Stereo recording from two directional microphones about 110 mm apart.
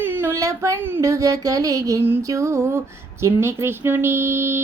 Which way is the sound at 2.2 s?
25° right (ahead or behind).